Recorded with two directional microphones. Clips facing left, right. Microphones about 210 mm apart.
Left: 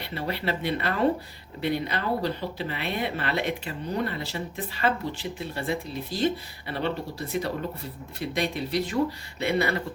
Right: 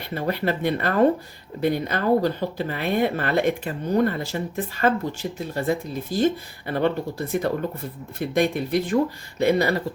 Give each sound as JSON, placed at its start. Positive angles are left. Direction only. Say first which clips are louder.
{"t": 0.0, "sound": "speech", "louder": "right 5 dB", "side_deg": -45}
{"t": 8.2, "sound": "speech", "louder": "right 6 dB", "side_deg": -50}
{"t": 9.4, "sound": "speech", "louder": "right 6 dB", "side_deg": -40}